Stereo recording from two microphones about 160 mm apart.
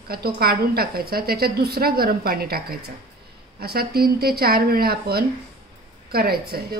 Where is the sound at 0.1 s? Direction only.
75° right (ahead or behind).